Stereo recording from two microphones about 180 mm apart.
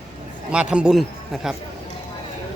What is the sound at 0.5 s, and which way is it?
Speech, 5° right (ahead or behind).